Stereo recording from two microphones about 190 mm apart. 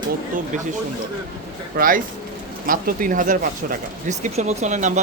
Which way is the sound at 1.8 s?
50° right (ahead or behind).